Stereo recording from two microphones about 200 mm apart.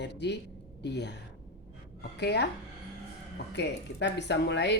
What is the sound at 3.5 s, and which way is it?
A woman's voice, 60° left (ahead or behind).